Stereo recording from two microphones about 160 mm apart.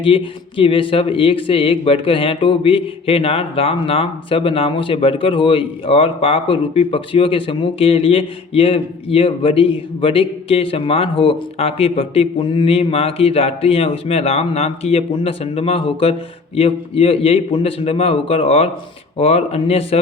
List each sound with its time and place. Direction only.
0.0 s a man's voice: 35° left (ahead or behind)